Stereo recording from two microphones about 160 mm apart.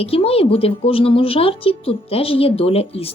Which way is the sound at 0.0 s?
35° left (ahead or behind).